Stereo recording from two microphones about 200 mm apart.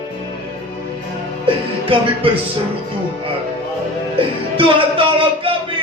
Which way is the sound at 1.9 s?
25° right (ahead or behind).